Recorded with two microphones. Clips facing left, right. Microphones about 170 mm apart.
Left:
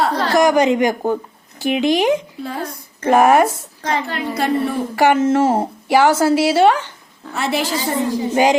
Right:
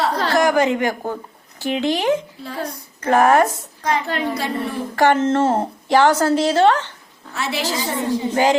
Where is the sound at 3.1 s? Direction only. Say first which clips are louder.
Left 2 dB; 15° left (ahead or behind).